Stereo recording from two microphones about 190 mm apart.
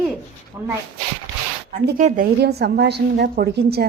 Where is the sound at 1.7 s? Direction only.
45° right (ahead or behind).